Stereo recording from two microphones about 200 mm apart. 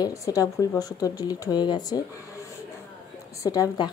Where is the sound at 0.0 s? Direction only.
15° left (ahead or behind).